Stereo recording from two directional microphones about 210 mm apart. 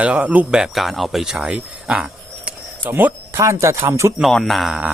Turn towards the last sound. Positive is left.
turn(degrees=0)  # may be behind; listen again after turning